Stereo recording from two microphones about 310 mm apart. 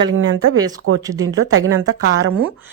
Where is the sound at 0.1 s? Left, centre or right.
Right.